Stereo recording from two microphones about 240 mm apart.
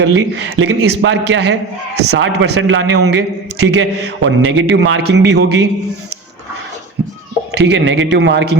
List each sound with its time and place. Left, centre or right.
0.0 s a man's voice: right
7.5 s a man's voice: right